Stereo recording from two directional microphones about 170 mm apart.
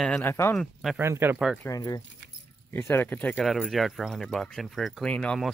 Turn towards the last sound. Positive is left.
turn(degrees=5)  # may be behind; listen again after turning